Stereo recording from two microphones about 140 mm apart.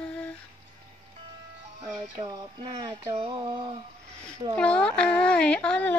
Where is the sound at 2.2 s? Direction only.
25° right (ahead or behind).